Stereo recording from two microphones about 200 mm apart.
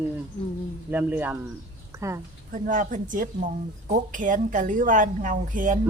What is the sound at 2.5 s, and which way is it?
A woman's voice, 40° right (ahead or behind).